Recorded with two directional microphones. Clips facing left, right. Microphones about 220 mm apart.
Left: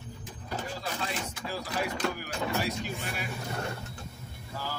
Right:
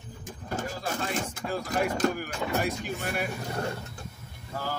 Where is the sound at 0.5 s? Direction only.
45° right (ahead or behind).